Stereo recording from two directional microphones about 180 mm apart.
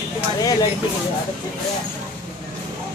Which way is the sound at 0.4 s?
20° left (ahead or behind).